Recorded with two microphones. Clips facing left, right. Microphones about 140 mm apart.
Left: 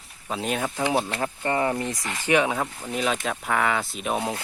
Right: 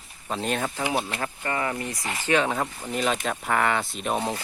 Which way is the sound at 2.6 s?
Centre (ahead or behind).